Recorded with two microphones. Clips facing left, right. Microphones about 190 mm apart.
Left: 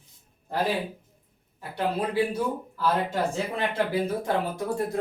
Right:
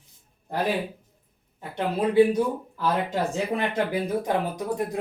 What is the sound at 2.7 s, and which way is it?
Speech, 15° right (ahead or behind).